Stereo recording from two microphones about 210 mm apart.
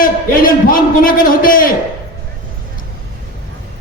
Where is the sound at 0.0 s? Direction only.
40° left (ahead or behind).